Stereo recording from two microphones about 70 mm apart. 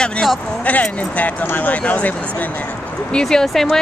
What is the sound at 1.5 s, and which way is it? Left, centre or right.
Speech, left.